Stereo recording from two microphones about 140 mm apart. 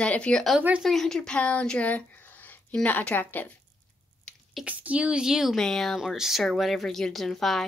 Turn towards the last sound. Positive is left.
turn(degrees=0)  # may be behind; listen again after turning